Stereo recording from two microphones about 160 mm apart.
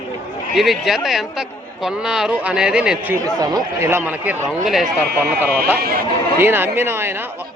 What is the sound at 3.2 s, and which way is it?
A man's voice, 20° right (ahead or behind).